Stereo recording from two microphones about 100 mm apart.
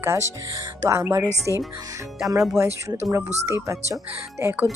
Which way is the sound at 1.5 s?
35° left (ahead or behind).